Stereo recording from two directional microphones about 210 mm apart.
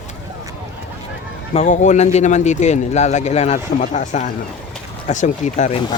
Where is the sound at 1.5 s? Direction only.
35° left (ahead or behind).